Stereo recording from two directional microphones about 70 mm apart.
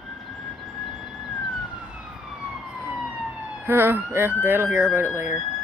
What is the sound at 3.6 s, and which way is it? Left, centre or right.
Speech, right.